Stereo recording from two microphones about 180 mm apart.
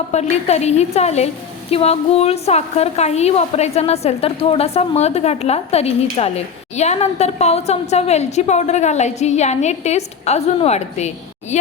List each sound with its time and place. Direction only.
0.1 s a woman's voice: 40° left (ahead or behind)